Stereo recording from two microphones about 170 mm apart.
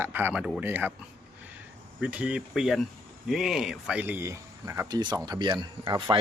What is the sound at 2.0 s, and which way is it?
Speech, 10° right (ahead or behind).